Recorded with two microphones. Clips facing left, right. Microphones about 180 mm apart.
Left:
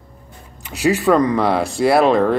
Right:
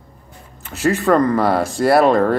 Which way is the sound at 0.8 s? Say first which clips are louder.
Even; centre (ahead or behind).